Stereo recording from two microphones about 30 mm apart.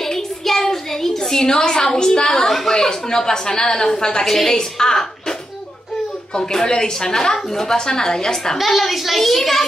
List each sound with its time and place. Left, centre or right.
0.0 s a child's voice: centre
2.4 s a woman's voice: centre
2.7 s a woman's voice: left
6.6 s a woman's voice: left
8.6 s a child's voice: centre